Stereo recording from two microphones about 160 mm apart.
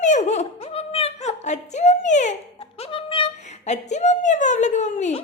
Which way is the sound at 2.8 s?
35° left (ahead or behind).